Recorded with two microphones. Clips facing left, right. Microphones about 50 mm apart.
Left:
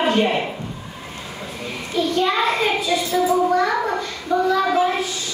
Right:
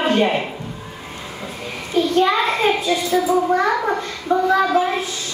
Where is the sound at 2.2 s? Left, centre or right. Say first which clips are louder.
Right 2 dB; right.